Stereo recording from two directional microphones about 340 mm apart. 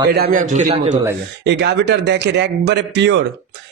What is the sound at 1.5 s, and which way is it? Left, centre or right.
A man's voice, right.